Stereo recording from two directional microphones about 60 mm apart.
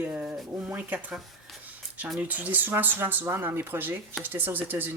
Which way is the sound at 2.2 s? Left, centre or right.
Right.